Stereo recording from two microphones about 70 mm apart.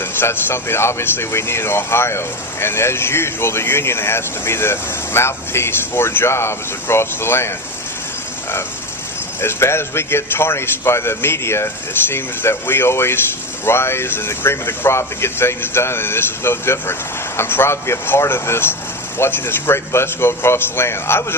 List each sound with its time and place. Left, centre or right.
0.0 s speech: left
9.4 s speech: left